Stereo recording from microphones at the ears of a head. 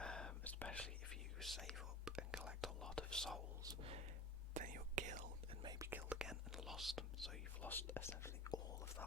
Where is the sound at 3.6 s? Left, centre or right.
Right.